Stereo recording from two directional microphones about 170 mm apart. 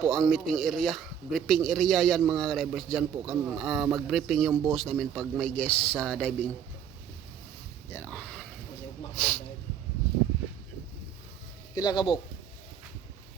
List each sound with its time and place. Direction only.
0.1 s speech: centre (ahead or behind)
7.9 s speech: 10° left (ahead or behind)
11.7 s speech: 25° left (ahead or behind)